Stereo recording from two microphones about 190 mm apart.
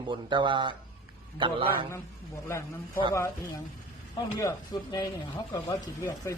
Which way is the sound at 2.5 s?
15° left (ahead or behind).